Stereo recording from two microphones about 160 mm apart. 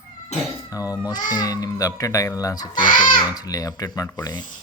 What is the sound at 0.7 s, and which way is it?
A man's voice, 20° left (ahead or behind).